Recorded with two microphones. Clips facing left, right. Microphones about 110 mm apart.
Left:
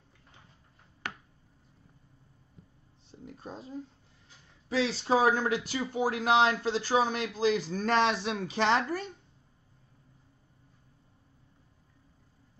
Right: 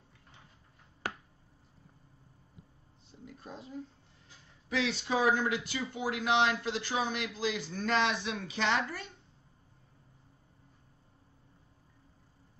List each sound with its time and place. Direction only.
3.1 s speech: 35° left (ahead or behind)